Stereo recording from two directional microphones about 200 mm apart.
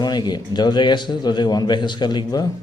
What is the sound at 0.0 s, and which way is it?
A man's voice, 20° left (ahead or behind).